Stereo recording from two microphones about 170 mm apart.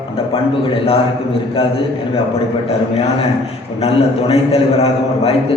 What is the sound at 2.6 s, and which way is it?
A man's voice, 35° left (ahead or behind).